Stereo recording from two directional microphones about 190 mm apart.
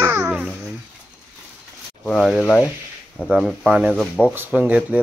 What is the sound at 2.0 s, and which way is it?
A man's voice, 5° left (ahead or behind).